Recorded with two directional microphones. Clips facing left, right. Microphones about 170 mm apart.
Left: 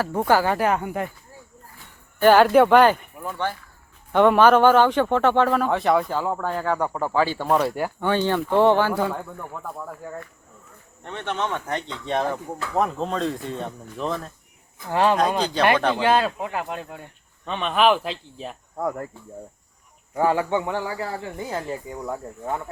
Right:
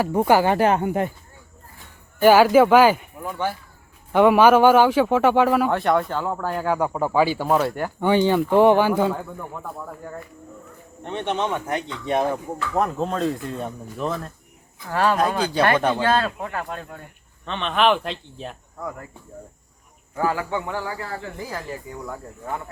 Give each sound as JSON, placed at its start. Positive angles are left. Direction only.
{"t": 0.2, "sound": "speech", "side_deg": -20}
{"t": 2.2, "sound": "a man's voice", "side_deg": -5}
{"t": 8.0, "sound": "a man's voice", "side_deg": -15}
{"t": 9.1, "sound": "speech", "side_deg": 0}
{"t": 11.0, "sound": "a man's voice", "side_deg": -20}
{"t": 14.8, "sound": "speech", "side_deg": 20}
{"t": 15.4, "sound": "a man's voice", "side_deg": -10}
{"t": 16.0, "sound": "speech", "side_deg": 15}
{"t": 20.1, "sound": "speech", "side_deg": 25}